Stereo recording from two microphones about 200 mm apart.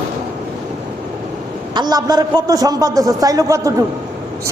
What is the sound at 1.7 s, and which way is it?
A man's voice, 20° right (ahead or behind).